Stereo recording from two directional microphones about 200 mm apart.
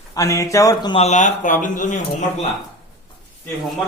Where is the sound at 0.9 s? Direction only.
35° left (ahead or behind).